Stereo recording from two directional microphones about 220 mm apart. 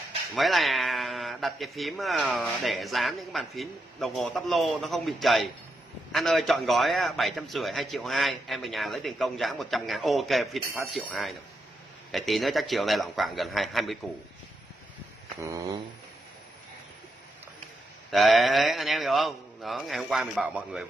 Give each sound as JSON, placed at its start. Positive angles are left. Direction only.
{"t": 0.3, "sound": "speech", "side_deg": 0}
{"t": 15.4, "sound": "a sound", "side_deg": -15}
{"t": 18.1, "sound": "speech", "side_deg": 0}